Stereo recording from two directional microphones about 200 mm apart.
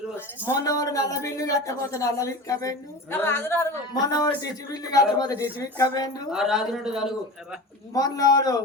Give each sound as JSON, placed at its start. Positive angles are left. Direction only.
{"t": 0.4, "sound": "speech", "side_deg": 15}
{"t": 6.3, "sound": "speech", "side_deg": 0}
{"t": 7.9, "sound": "speech", "side_deg": 20}